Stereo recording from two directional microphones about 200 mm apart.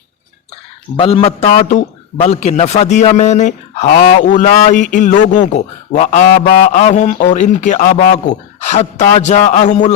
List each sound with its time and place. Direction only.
0.9 s a man's voice: 30° left (ahead or behind)